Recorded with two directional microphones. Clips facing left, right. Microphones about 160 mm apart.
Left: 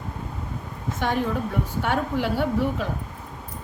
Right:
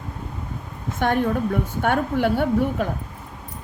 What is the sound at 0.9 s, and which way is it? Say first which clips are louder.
A woman's voice: right 4 dB; 55° right (ahead or behind).